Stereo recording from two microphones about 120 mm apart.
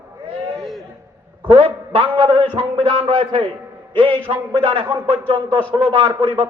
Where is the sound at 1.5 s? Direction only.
50° right (ahead or behind).